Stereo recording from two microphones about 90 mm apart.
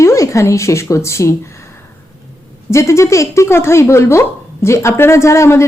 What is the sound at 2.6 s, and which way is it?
A woman's voice, 30° left (ahead or behind).